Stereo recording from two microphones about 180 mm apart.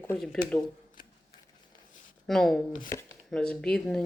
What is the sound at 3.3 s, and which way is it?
Speech, 5° left (ahead or behind).